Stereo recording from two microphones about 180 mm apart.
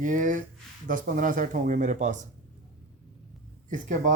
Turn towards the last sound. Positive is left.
turn(degrees=-45)  # may be behind; listen again after turning